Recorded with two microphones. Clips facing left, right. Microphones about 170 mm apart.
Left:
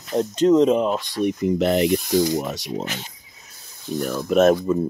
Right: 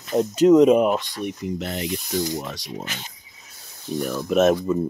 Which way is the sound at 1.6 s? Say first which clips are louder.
Left 10 dB; 75° left (ahead or behind).